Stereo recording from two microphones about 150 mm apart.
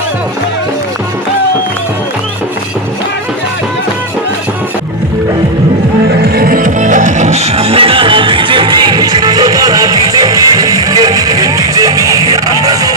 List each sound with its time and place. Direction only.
6.2 s music: 90° right; by 12.9 s 25° right (ahead or behind)